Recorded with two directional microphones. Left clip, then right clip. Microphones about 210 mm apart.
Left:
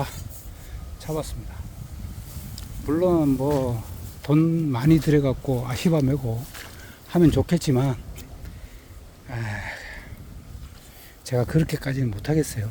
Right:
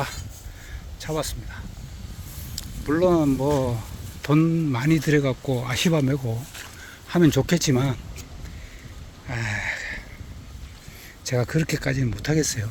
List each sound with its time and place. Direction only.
0.9 s speech: 5° right (ahead or behind)
2.6 s speech: centre (ahead or behind)
4.2 s speech: 10° left (ahead or behind)
9.2 s gasp: 15° left (ahead or behind)
11.2 s speech: 15° left (ahead or behind)